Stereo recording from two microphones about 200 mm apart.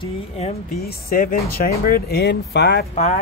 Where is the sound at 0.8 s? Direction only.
50° left (ahead or behind).